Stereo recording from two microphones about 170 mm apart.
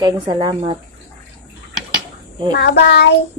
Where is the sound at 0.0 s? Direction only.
25° right (ahead or behind).